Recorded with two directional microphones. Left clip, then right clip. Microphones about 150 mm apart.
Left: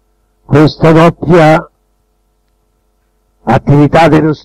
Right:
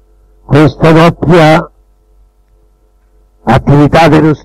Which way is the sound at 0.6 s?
40° right (ahead or behind).